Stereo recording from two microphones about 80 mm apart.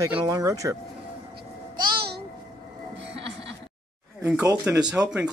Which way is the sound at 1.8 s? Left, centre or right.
Right.